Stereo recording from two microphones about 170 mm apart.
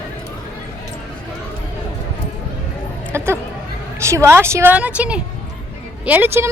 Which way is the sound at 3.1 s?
15° right (ahead or behind).